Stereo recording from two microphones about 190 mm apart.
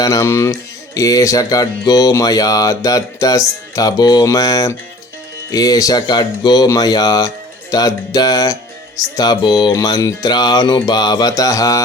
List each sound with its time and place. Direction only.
0.0 s music: 15° left (ahead or behind)
0.9 s speech: 15° left (ahead or behind)